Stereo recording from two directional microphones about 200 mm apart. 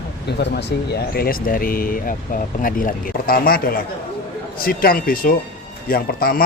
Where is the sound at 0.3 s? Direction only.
55° left (ahead or behind).